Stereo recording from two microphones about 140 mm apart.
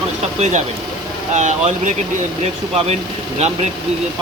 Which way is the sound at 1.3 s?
55° right (ahead or behind).